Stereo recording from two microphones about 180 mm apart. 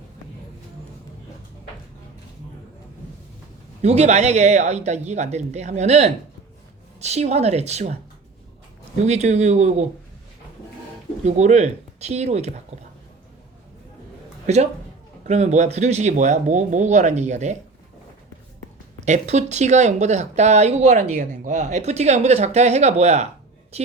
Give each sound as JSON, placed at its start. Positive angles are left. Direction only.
{"t": 3.8, "sound": "speech", "side_deg": -40}
{"t": 9.0, "sound": "speech", "side_deg": -40}
{"t": 11.3, "sound": "speech", "side_deg": -40}
{"t": 14.4, "sound": "a woman's voice", "side_deg": -40}
{"t": 19.0, "sound": "speech", "side_deg": -40}